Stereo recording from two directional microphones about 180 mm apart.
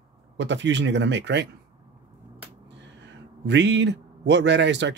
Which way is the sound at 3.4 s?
75° right (ahead or behind).